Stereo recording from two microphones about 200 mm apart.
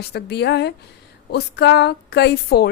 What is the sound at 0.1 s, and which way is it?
A woman's voice, 55° left (ahead or behind).